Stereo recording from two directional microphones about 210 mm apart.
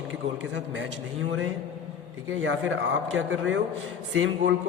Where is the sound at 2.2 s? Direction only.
65° right (ahead or behind).